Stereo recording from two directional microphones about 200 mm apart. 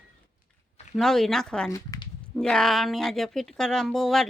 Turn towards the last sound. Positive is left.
turn(degrees=0)  # may be behind; listen again after turning